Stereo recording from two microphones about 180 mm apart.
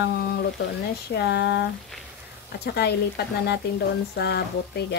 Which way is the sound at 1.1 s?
70° left (ahead or behind).